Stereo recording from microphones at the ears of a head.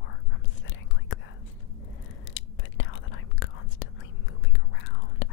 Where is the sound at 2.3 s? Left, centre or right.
Left.